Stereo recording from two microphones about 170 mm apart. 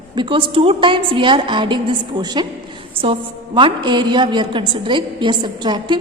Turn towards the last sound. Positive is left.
turn(degrees=-25)  # may be behind; listen again after turning